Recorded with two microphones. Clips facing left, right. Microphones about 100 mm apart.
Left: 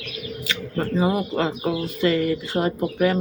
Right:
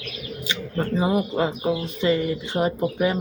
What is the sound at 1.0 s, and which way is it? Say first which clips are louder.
Speech: even; 20° right (ahead or behind).